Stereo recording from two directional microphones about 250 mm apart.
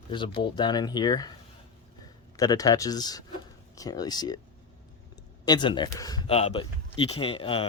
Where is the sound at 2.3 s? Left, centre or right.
Centre.